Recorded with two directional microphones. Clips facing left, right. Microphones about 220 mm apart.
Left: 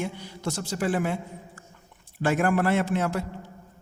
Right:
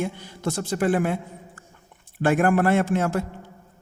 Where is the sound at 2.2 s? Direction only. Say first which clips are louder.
Right 4 dB; 55° right (ahead or behind).